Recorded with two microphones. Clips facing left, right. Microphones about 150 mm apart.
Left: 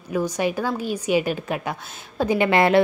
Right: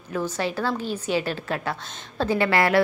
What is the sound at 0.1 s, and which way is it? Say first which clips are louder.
A woman's voice: left 4 dB; 15° left (ahead or behind).